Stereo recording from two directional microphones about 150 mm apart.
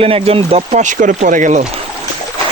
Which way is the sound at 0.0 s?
40° right (ahead or behind).